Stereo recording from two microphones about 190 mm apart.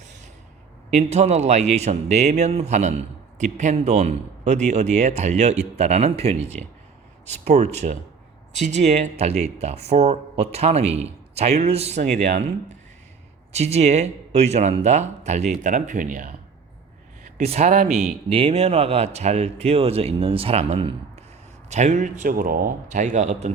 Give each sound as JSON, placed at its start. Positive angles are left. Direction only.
{"t": 0.9, "sound": "a man's voice", "side_deg": -35}